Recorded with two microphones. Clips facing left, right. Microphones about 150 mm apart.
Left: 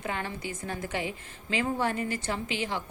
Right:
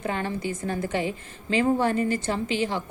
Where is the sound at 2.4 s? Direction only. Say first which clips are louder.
Right 6 dB; 15° left (ahead or behind).